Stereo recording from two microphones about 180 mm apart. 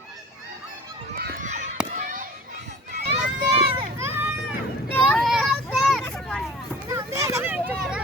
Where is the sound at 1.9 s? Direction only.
45° right (ahead or behind).